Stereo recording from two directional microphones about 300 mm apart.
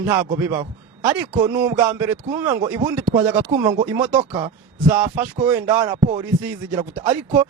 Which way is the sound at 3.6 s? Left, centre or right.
Centre.